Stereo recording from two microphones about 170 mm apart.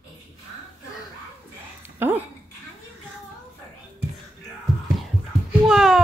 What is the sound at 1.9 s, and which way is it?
Dog, 10° right (ahead or behind).